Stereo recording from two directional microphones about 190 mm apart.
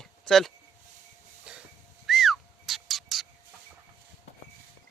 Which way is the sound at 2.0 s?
Centre (ahead or behind).